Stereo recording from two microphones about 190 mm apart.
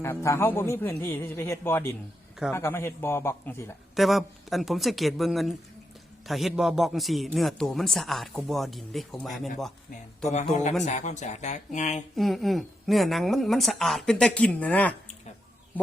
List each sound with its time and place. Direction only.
0.0 s a man's voice: 15° left (ahead or behind)
3.9 s a man's voice: centre (ahead or behind)
10.5 s speech: 35° left (ahead or behind)
12.1 s a man's voice: centre (ahead or behind)